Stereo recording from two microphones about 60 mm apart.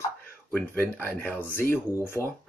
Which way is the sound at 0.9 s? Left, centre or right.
Left.